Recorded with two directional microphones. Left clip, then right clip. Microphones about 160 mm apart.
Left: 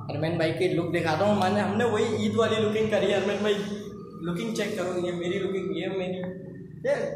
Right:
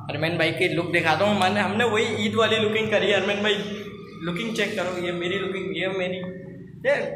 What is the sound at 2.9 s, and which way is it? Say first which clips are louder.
A man's voice: right 3 dB; 15° right (ahead or behind).